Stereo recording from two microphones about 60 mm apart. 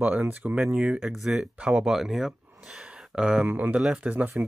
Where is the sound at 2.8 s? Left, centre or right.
Centre.